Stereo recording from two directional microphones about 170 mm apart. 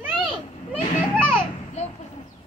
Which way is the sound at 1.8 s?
40° left (ahead or behind).